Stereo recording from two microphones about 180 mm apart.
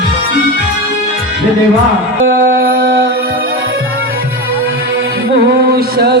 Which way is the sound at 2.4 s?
60° right (ahead or behind).